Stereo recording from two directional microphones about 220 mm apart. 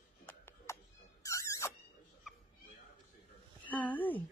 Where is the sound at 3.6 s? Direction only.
5° left (ahead or behind).